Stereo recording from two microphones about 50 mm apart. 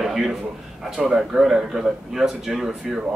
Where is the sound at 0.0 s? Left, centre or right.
Centre.